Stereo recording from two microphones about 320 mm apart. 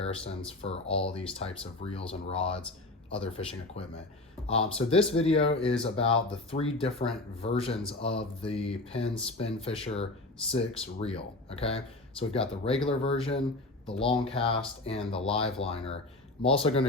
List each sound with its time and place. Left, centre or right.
0.0 s speech: centre
12.8 s speech: centre